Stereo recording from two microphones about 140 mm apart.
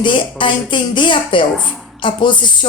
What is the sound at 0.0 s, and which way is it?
Speech, 35° left (ahead or behind).